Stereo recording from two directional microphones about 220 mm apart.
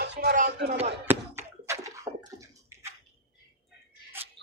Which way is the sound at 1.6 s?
15° right (ahead or behind).